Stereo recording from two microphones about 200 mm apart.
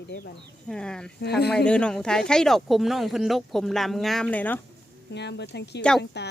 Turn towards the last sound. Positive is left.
turn(degrees=5)  # may be behind; listen again after turning